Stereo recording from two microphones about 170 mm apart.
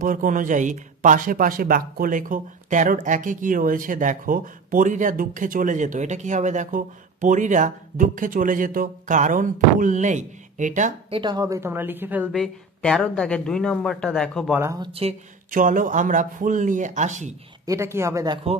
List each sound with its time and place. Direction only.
0.0 s speech: 50° right (ahead or behind)
11.1 s a woman's voice: 30° right (ahead or behind); by 12.4 s 10° right (ahead or behind)
12.4 s speech: 5° left (ahead or behind)
14.5 s a woman's voice: 15° right (ahead or behind)
14.8 s speech: 35° right (ahead or behind)
15.5 s speech: 50° right (ahead or behind)
17.6 s a woman's voice: 15° right (ahead or behind)